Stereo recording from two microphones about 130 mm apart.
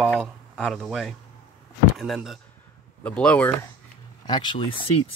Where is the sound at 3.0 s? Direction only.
10° left (ahead or behind).